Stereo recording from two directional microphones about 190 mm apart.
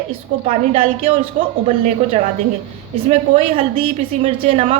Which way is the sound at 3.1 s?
35° right (ahead or behind).